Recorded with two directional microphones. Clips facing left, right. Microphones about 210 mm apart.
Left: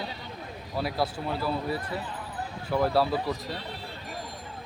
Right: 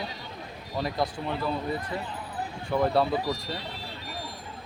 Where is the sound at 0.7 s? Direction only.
5° left (ahead or behind).